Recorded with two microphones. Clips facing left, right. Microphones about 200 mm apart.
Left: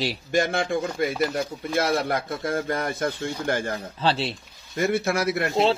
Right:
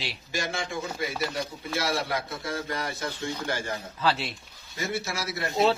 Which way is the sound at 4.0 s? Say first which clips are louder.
Left 3 dB; 30° left (ahead or behind).